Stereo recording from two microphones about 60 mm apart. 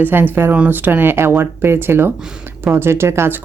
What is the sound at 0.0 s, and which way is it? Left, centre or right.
Speech, right.